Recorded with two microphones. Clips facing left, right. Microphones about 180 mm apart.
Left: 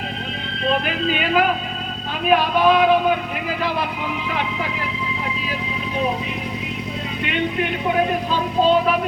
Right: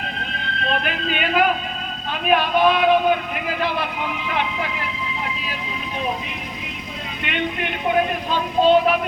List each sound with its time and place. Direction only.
0.7 s speech: 35° left (ahead or behind)
7.3 s speech: 35° left (ahead or behind)